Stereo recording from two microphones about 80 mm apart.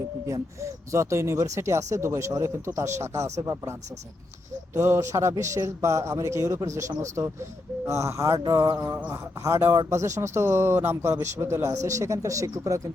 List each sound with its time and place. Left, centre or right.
0.6 s speech: right
9.4 s speech: right